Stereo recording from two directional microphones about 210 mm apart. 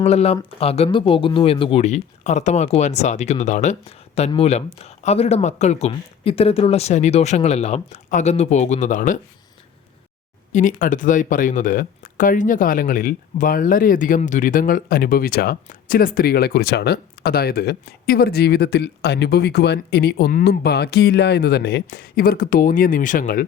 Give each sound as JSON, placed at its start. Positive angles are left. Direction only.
{"t": 0.0, "sound": "speech", "side_deg": 30}
{"t": 10.5, "sound": "speech", "side_deg": 40}